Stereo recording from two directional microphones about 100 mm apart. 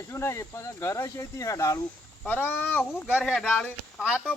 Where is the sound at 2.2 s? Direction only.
20° left (ahead or behind).